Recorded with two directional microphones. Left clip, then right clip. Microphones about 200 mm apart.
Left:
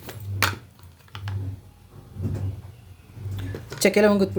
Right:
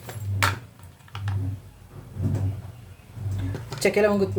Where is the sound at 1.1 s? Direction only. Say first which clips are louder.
Right 1 dB; 30° left (ahead or behind).